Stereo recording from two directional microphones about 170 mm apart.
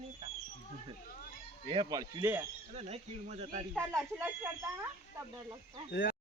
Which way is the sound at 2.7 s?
40° right (ahead or behind).